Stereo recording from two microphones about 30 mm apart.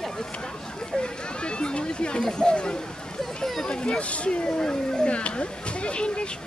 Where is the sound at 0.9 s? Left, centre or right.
Left.